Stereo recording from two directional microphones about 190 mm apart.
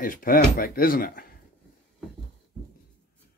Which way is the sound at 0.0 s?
45° left (ahead or behind).